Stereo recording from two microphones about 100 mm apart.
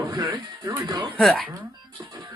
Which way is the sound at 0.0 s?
35° right (ahead or behind).